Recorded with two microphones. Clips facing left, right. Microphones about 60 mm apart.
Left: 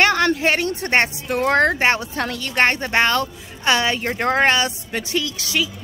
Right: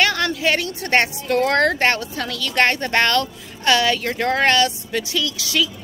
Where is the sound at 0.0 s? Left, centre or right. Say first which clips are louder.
Left 3 dB; left.